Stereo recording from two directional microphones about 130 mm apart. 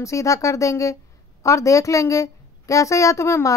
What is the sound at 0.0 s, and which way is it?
A woman's voice, 25° left (ahead or behind).